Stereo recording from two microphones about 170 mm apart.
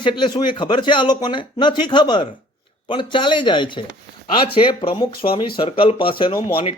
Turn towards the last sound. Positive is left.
turn(degrees=30)  # may be behind; listen again after turning